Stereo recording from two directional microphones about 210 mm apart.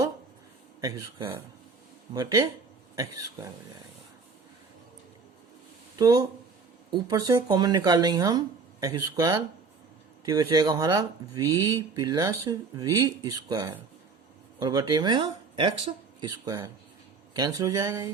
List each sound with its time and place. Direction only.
0.8 s speech: 15° right (ahead or behind)
6.0 s speech: 15° right (ahead or behind)
17.3 s speech: 15° right (ahead or behind)